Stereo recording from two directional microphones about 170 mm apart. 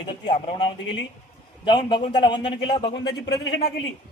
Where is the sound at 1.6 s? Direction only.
25° left (ahead or behind).